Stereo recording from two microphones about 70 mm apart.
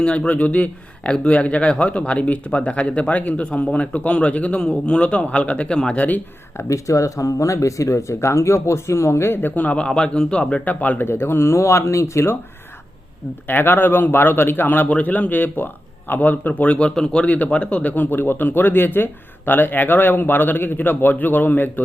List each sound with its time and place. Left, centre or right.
0.0 s speech: centre
6.6 s speech: left
13.5 s a man's voice: left